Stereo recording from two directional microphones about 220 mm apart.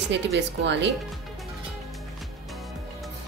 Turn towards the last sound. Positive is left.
turn(degrees=0)  # may be behind; listen again after turning